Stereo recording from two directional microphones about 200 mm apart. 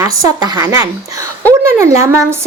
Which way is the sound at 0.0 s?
20° right (ahead or behind).